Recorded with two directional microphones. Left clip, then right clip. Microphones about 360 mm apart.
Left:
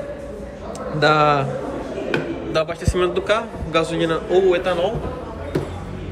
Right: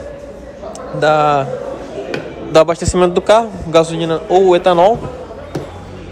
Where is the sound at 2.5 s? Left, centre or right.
Centre.